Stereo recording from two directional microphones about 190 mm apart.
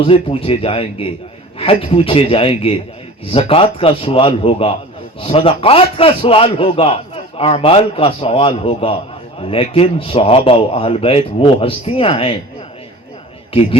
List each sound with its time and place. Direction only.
0.0 s a man's voice: 30° left (ahead or behind)
13.5 s a man's voice: 30° left (ahead or behind)